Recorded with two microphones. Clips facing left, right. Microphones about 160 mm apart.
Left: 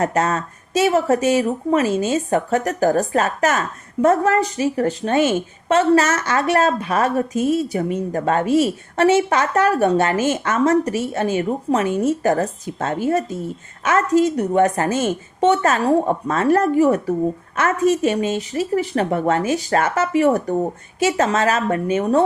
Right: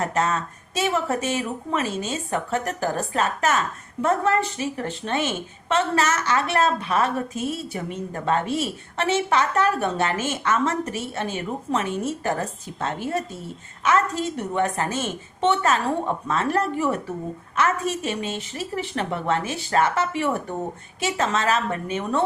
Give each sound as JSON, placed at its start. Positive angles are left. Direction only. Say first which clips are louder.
{"t": 0.0, "sound": "a woman's voice", "louder": "left 4 dB", "side_deg": 45}